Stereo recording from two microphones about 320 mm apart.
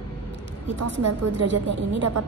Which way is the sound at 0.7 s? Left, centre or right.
Right.